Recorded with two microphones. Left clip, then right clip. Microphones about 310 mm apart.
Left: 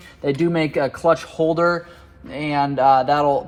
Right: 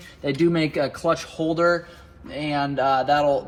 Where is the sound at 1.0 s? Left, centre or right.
Left.